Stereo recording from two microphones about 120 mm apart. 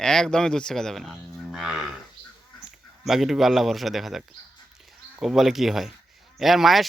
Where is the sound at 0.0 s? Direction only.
5° left (ahead or behind).